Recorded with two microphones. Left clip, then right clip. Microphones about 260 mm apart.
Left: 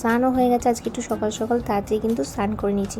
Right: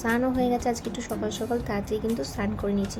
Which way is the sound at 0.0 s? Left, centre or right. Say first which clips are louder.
Left 6 dB; centre.